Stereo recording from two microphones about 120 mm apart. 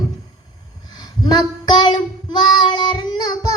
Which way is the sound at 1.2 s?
35° left (ahead or behind).